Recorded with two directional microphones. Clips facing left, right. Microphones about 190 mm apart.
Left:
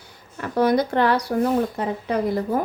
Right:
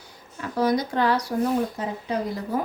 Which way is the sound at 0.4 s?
60° left (ahead or behind).